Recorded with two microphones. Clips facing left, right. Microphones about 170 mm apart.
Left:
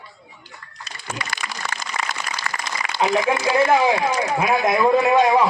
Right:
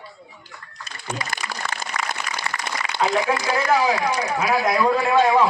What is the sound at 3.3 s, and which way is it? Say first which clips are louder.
Speech: left 3 dB; 25° left (ahead or behind).